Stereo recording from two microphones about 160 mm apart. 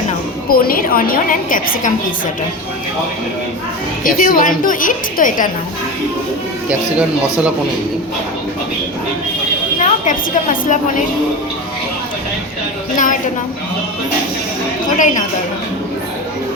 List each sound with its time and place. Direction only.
0.5 s a woman's voice: 65° left (ahead or behind)
4.0 s a woman's voice: 55° left (ahead or behind)
9.8 s a woman's voice: 50° left (ahead or behind)
13.0 s a woman's voice: 55° left (ahead or behind)
14.8 s a woman's voice: 50° left (ahead or behind)